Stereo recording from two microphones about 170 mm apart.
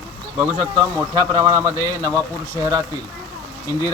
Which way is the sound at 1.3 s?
20° right (ahead or behind).